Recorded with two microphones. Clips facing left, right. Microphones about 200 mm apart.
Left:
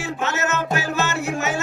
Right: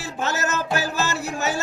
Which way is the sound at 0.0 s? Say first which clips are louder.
Left 2 dB; 35° right (ahead or behind).